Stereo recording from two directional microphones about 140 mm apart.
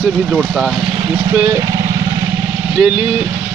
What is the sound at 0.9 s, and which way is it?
Vehicle, 30° right (ahead or behind).